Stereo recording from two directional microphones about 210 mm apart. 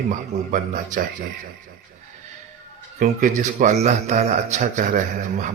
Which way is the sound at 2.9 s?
40° right (ahead or behind).